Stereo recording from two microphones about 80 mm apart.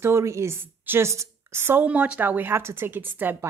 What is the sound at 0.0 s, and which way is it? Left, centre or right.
A woman's voice, right.